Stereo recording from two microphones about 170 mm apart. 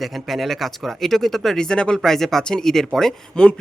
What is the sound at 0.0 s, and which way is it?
Speech, centre (ahead or behind).